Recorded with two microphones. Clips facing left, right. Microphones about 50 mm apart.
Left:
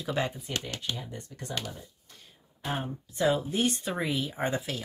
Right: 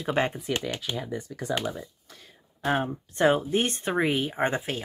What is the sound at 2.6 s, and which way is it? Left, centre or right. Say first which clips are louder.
Speech: right 8 dB; right.